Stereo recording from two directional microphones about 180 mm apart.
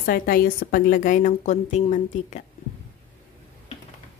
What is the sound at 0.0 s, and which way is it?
A woman's voice, 50° left (ahead or behind).